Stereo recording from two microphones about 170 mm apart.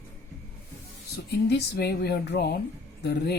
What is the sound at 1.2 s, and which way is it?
Speech, 75° left (ahead or behind).